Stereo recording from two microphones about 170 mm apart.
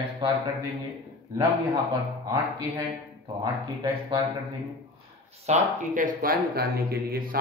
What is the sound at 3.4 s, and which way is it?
Speech, 25° right (ahead or behind).